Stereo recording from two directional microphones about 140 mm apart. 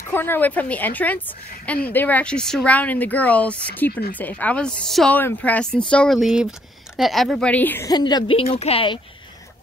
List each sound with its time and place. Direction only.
0.1 s a woman's voice: 15° left (ahead or behind)
7.9 s speech: 30° left (ahead or behind)